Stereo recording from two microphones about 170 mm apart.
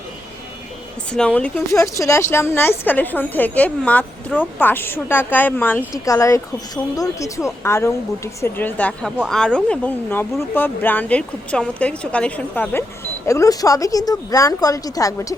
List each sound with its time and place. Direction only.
1.1 s speech: 5° left (ahead or behind)
1.7 s speech: 20° left (ahead or behind)